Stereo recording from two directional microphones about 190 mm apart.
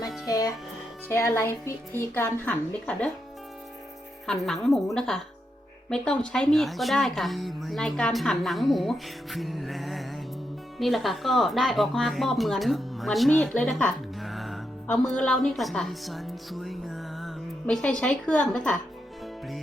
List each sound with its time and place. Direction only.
0.3 s a woman's voice: 20° left (ahead or behind)
4.3 s a woman's voice: centre (ahead or behind)